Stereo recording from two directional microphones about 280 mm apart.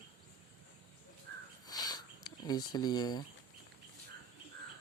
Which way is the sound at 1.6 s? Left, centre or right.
Centre.